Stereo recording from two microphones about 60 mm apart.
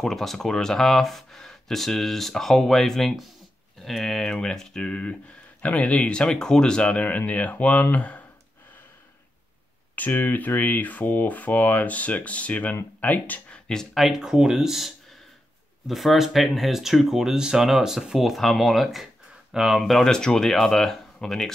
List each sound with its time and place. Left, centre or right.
0.0 s speech: centre; by 8.2 s left
9.9 s speech: left
13.9 s speech: centre
19.8 s speech: centre